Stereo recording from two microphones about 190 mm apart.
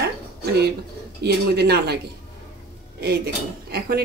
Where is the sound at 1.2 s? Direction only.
60° right (ahead or behind).